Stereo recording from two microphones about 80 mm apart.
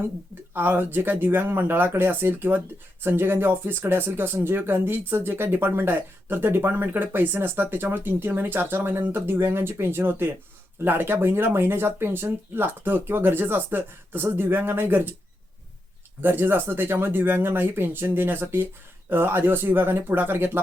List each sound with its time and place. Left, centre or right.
0.5 s speech: right
16.2 s speech: right